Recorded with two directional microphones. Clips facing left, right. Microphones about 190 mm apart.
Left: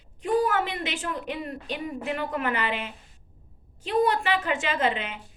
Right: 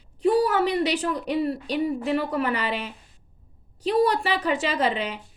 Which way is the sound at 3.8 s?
35° right (ahead or behind).